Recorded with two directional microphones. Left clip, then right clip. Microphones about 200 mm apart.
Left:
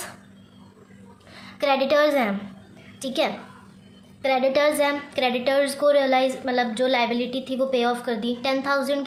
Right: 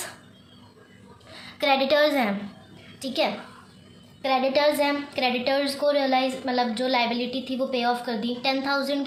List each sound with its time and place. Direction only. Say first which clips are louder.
1.3 s a woman's voice: even; 20° left (ahead or behind)